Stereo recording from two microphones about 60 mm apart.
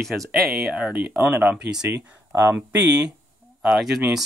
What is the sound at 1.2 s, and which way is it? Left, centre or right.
Speech, right.